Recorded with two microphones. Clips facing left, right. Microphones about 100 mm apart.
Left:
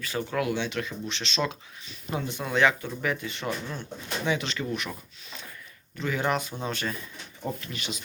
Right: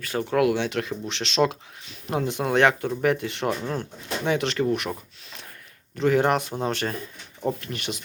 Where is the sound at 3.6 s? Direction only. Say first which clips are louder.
Right 6 dB; 45° right (ahead or behind).